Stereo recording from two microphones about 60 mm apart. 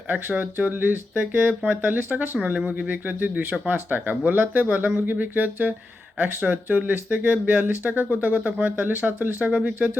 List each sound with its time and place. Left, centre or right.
0.1 s speech: right